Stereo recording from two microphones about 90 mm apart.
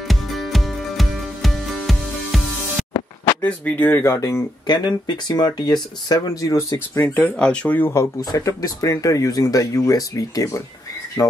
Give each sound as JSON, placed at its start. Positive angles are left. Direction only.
{"t": 0.1, "sound": "music", "side_deg": 0}
{"t": 3.3, "sound": "speech", "side_deg": 20}
{"t": 4.6, "sound": "speech", "side_deg": 55}
{"t": 7.0, "sound": "speech", "side_deg": 15}
{"t": 7.9, "sound": "speech", "side_deg": 35}